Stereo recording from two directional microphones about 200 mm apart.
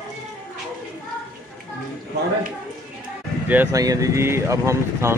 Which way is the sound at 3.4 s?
10° right (ahead or behind).